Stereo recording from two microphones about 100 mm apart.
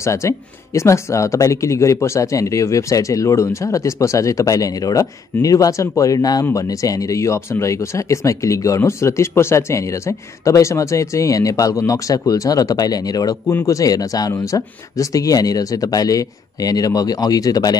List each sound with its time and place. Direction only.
0.0 s speech: 30° left (ahead or behind)